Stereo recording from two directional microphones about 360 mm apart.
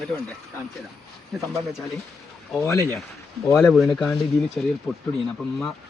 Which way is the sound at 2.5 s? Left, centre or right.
Centre.